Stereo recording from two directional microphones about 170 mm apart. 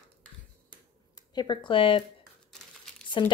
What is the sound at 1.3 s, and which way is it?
Speech, 25° left (ahead or behind).